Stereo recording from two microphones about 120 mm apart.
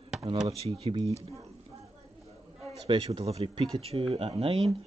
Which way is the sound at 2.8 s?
50° right (ahead or behind).